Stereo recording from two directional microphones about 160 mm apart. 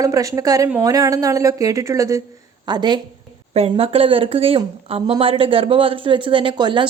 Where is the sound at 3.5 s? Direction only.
40° right (ahead or behind).